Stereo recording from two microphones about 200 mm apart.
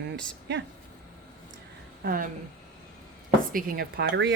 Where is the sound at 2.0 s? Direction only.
45° right (ahead or behind).